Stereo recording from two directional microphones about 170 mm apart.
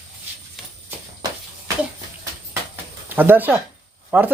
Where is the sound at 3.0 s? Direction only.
10° right (ahead or behind).